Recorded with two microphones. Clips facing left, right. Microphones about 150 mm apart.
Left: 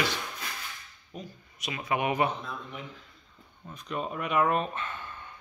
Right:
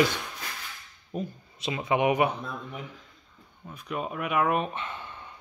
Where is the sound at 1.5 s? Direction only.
25° right (ahead or behind).